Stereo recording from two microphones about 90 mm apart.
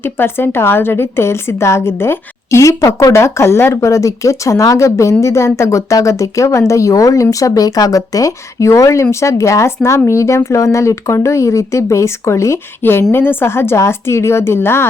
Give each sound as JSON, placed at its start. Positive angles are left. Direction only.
{"t": 0.0, "sound": "speech", "side_deg": 25}